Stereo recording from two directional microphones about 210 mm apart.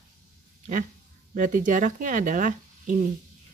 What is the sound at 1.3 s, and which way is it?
Speech, 40° right (ahead or behind).